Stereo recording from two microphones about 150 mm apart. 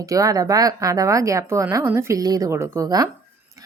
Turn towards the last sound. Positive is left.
turn(degrees=-20)  # may be behind; listen again after turning